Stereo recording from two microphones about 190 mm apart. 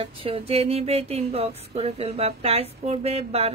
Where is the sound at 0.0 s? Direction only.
30° right (ahead or behind).